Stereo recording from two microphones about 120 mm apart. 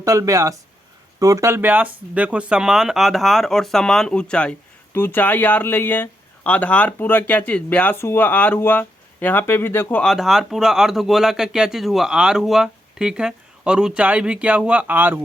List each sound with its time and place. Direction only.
0.0 s speech: 25° right (ahead or behind); by 4.5 s 10° left (ahead or behind)
4.9 s speech: 20° left (ahead or behind)
10.0 s speech: centre (ahead or behind); by 15.2 s 15° right (ahead or behind)